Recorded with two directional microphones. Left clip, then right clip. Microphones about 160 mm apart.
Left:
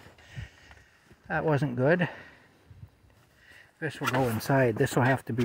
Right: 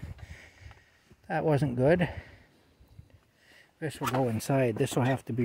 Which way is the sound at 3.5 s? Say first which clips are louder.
Left 2 dB; 30° right (ahead or behind).